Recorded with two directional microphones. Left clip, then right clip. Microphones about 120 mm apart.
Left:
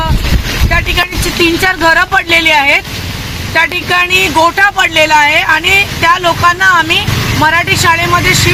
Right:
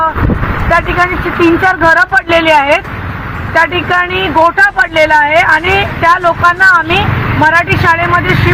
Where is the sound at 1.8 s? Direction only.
25° left (ahead or behind).